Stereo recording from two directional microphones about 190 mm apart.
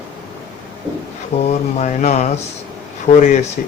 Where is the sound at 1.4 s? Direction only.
35° left (ahead or behind).